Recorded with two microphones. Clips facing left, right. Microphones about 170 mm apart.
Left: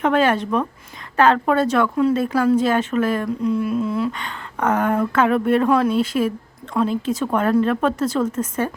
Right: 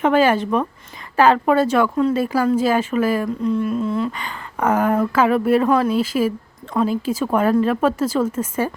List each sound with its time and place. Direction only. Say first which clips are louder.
0.0 s speech: right 2 dB; 5° right (ahead or behind)
4.2 s speech: right 1 dB; 5° right (ahead or behind)